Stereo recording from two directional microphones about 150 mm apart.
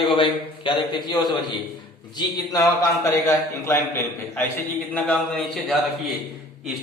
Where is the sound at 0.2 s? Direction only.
35° left (ahead or behind).